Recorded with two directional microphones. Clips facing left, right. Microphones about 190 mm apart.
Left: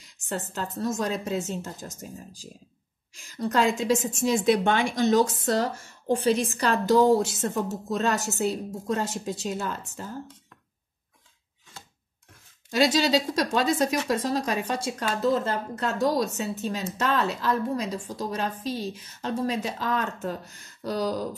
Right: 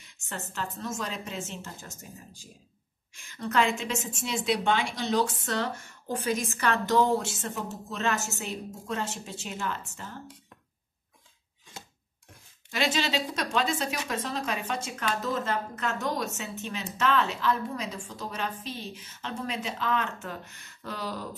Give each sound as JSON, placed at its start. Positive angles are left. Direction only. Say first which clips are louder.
{"t": 0.5, "sound": "a woman's voice", "louder": "left 4 dB", "side_deg": 35}
{"t": 3.3, "sound": "a woman's voice", "louder": "left 3 dB", "side_deg": 35}
{"t": 12.7, "sound": "a woman's voice", "louder": "left 6 dB", "side_deg": 40}